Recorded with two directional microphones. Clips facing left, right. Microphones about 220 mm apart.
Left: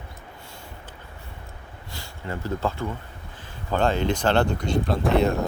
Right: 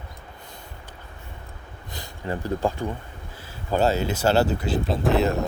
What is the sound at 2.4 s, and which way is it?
Speech, 15° right (ahead or behind).